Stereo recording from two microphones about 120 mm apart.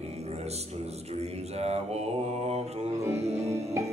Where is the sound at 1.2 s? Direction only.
60° right (ahead or behind).